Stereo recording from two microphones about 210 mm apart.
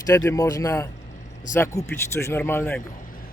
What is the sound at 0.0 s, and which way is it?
Speech, 15° left (ahead or behind).